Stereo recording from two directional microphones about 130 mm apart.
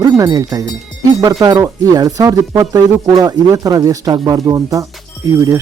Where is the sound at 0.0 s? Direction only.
30° right (ahead or behind).